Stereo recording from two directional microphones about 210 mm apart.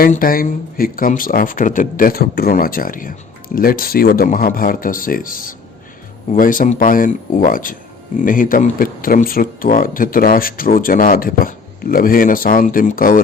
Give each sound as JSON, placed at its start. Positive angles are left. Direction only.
{"t": 0.0, "sound": "speech", "side_deg": 45}